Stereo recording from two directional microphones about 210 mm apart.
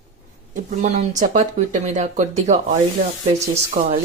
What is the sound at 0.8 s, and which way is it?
Speech, 35° right (ahead or behind).